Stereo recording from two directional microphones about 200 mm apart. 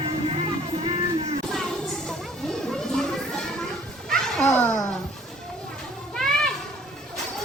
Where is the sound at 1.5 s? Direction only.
Centre (ahead or behind).